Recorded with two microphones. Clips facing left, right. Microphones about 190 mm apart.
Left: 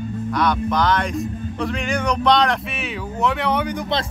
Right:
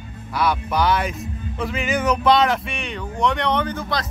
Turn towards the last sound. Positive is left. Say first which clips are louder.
# left 1 dB
turn(degrees=15)  # may be behind; listen again after turning